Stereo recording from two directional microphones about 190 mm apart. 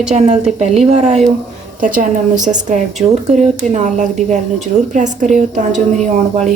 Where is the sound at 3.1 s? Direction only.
35° right (ahead or behind).